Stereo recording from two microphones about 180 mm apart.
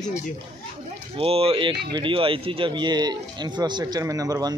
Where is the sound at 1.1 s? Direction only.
30° right (ahead or behind).